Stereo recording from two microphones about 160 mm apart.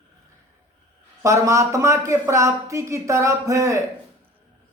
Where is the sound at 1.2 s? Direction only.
20° right (ahead or behind).